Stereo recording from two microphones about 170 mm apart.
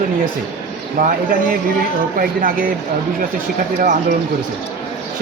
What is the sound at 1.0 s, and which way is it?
Speech, 50° right (ahead or behind).